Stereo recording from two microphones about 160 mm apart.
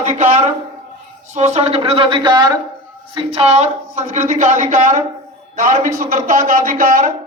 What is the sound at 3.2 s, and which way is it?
A woman's voice, 40° right (ahead or behind).